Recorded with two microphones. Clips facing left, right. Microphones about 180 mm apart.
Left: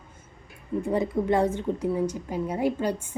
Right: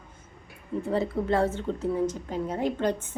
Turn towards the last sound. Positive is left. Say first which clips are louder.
# left 1 dB
turn(degrees=10)  # may be behind; listen again after turning